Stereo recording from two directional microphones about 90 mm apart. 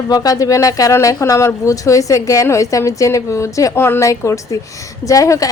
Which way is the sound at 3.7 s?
25° left (ahead or behind).